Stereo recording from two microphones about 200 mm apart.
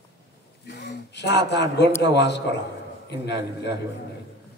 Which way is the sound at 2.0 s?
60° left (ahead or behind).